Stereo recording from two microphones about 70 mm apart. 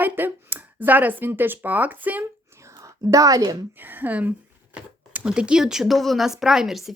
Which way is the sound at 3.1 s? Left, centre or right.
Right.